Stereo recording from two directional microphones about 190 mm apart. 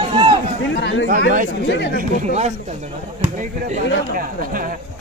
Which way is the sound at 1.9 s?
35° right (ahead or behind).